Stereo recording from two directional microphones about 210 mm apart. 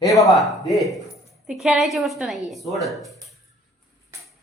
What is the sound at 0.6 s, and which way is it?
A woman's voice, centre (ahead or behind).